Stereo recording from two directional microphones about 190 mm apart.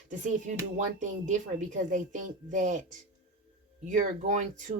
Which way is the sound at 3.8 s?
40° right (ahead or behind).